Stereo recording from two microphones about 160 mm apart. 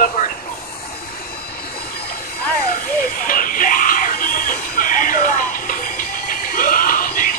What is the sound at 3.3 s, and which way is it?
Music, 60° left (ahead or behind).